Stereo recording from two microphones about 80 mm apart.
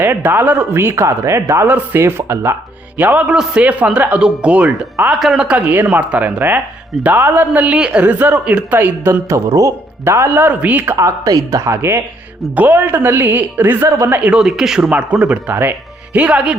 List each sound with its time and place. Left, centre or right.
0.0 s speech: right
1.6 s speech: right
3.0 s speech: centre
7.0 s speech: right
9.3 s speech: right
10.0 s speech: right
10.9 s speech: right
12.5 s speech: right
14.4 s speech: centre